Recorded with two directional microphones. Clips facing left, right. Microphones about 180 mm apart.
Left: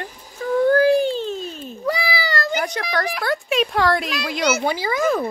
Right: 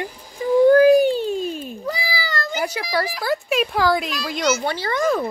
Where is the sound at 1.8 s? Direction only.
70° left (ahead or behind).